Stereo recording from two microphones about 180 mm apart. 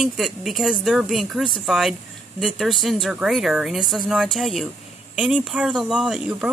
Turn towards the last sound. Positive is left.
turn(degrees=0)  # may be behind; listen again after turning